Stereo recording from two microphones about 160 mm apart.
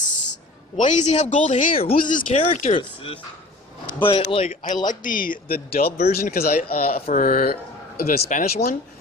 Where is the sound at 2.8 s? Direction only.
35° left (ahead or behind).